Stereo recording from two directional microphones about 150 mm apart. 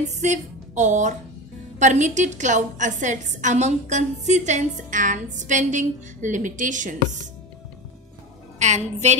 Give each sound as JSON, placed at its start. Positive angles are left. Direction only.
{"t": 0.0, "sound": "a woman's voice", "side_deg": -50}
{"t": 8.5, "sound": "a woman's voice", "side_deg": -50}